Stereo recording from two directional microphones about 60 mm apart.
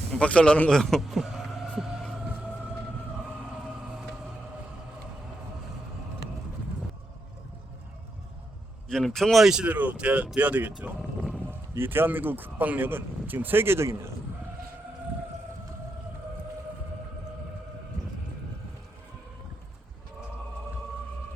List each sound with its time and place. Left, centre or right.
0.1 s speech: centre
0.7 s speech: centre
1.2 s speech: centre
1.8 s hum: centre
8.9 s speech: centre
9.4 s speech: centre
9.6 s speech: right